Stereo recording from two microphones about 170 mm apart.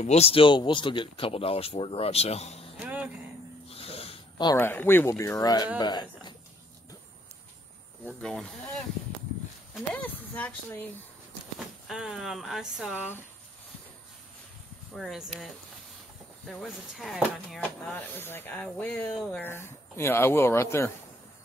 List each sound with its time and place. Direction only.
0.0 s speech: 40° left (ahead or behind)
2.8 s a sound: 10° right (ahead or behind)
3.6 s a sound: 35° left (ahead or behind)
4.6 s speech: 10° left (ahead or behind)
8.0 s speech: 5° left (ahead or behind)
9.8 s speech: 10° left (ahead or behind)
11.9 s speech: 5° right (ahead or behind)
15.0 s speech: centre (ahead or behind)
16.4 s speech: centre (ahead or behind)
19.5 s speech: 15° left (ahead or behind)